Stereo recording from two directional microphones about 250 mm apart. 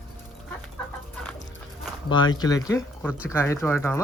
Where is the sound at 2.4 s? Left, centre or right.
Centre.